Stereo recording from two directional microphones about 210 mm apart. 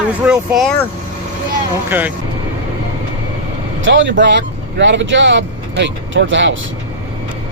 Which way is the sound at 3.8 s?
60° right (ahead or behind).